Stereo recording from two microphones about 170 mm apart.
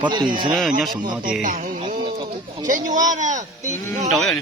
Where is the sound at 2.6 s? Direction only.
50° right (ahead or behind).